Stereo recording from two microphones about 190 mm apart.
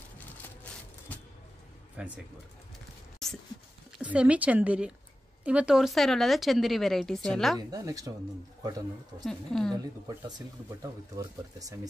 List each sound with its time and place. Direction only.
2.0 s speech: 5° right (ahead or behind)
3.2 s a sound: centre (ahead or behind)
4.0 s speech: 5° right (ahead or behind)
7.5 s speech: 20° right (ahead or behind)
9.2 s speech: 5° left (ahead or behind)
10.8 s speech: 15° right (ahead or behind)